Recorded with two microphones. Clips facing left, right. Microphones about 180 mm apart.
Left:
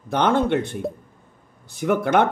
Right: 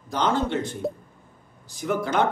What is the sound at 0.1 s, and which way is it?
A man's voice, 60° left (ahead or behind).